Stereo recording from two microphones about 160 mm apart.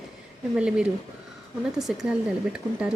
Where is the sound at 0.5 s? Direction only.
5° right (ahead or behind).